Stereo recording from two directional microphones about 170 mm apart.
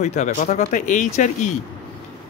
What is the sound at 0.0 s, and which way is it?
Speech, 45° left (ahead or behind).